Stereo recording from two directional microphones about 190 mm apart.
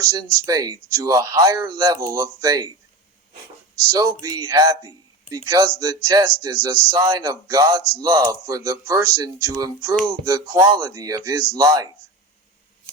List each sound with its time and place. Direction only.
0.2 s speech: 20° right (ahead or behind)
3.9 s speech: 20° right (ahead or behind)